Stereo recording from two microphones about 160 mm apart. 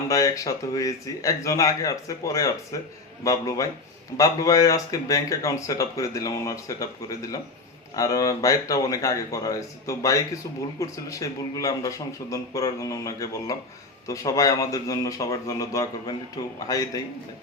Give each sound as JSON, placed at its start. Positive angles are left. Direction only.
{"t": 0.1, "sound": "speech", "side_deg": 20}